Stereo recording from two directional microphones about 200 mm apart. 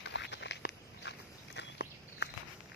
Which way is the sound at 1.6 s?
55° left (ahead or behind).